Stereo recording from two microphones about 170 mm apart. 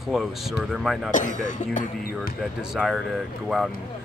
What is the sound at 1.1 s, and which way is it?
Speech, 50° left (ahead or behind).